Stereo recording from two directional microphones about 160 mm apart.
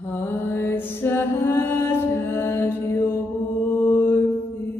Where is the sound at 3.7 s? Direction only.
20° left (ahead or behind).